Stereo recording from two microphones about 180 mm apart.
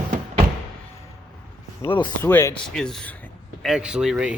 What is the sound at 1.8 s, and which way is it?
Speech, 25° left (ahead or behind).